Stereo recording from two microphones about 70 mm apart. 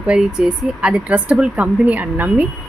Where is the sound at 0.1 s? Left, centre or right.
Centre.